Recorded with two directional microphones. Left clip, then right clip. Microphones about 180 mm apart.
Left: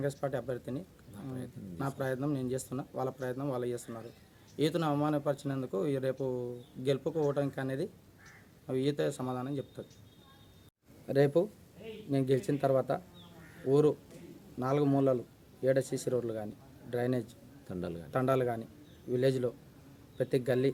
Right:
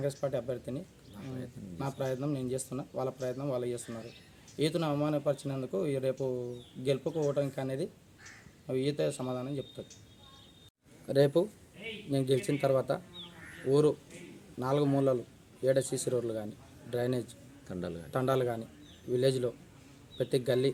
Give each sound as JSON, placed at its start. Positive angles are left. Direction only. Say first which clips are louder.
{"t": 0.2, "sound": "a man's voice", "louder": "right 1 dB", "side_deg": 0}
{"t": 2.0, "sound": "a man's voice", "louder": "even", "side_deg": 0}
{"t": 11.0, "sound": "a man's voice", "louder": "right 1 dB", "side_deg": 5}
{"t": 17.7, "sound": "a man's voice", "louder": "even", "side_deg": 30}
{"t": 18.1, "sound": "a man's voice", "louder": "even", "side_deg": 5}